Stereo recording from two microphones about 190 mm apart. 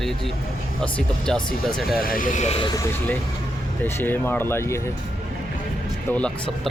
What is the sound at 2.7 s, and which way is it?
Speech, 15° left (ahead or behind).